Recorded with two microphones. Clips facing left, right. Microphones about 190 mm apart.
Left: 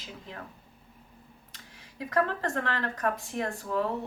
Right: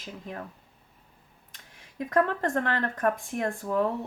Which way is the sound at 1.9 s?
50° right (ahead or behind).